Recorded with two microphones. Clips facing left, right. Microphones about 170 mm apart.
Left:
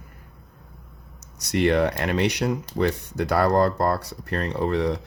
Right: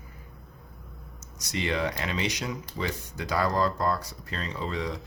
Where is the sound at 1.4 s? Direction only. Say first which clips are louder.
Left 9 dB; 60° left (ahead or behind).